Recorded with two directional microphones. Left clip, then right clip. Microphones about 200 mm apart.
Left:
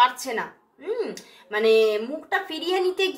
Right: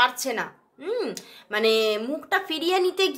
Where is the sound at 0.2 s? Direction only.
40° right (ahead or behind).